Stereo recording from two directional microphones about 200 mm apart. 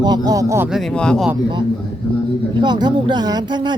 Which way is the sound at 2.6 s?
20° right (ahead or behind).